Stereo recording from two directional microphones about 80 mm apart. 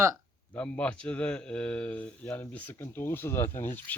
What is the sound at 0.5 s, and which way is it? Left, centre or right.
Speech, centre.